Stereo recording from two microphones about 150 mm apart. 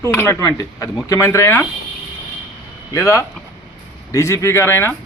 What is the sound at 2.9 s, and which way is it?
Speech, 20° left (ahead or behind).